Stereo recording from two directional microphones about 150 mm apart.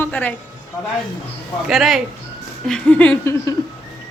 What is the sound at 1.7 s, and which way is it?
A man's voice, centre (ahead or behind).